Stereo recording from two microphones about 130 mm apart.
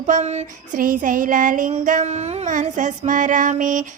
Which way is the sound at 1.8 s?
75° right (ahead or behind).